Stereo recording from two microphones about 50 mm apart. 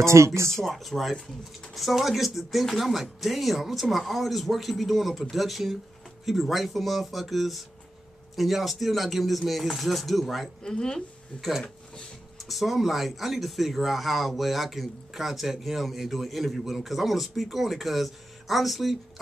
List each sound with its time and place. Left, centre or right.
0.0 s speech: right
0.6 s speech: centre
10.6 s speech: centre
12.4 s speech: centre